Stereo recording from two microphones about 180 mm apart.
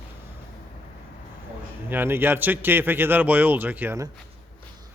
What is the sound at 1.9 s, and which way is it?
A man's voice, 10° right (ahead or behind).